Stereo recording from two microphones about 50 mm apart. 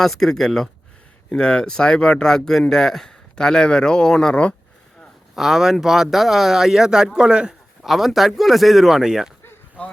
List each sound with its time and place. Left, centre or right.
0.0 s speech: centre
1.3 s speech: centre
5.3 s speech: centre
7.8 s speech: centre
9.8 s speech: left